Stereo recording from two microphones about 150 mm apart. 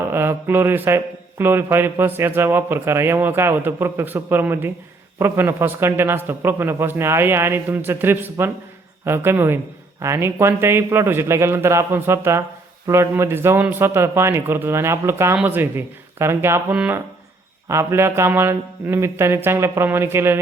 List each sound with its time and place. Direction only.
0.1 s a man's voice: 15° right (ahead or behind)